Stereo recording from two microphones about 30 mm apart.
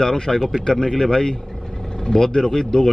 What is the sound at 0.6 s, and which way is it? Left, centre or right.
A man's voice, left.